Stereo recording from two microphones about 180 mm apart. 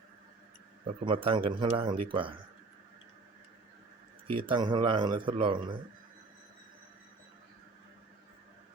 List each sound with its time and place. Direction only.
1.0 s speech: 30° right (ahead or behind)
4.3 s speech: 30° right (ahead or behind)